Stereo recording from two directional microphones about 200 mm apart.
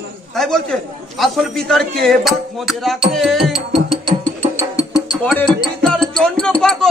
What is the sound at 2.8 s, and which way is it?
Music, centre (ahead or behind).